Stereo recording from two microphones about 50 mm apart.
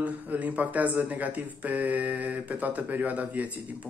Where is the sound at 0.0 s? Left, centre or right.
Right.